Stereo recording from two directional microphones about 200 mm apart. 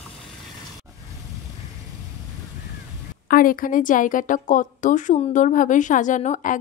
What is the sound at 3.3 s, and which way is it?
A woman's voice, 45° left (ahead or behind).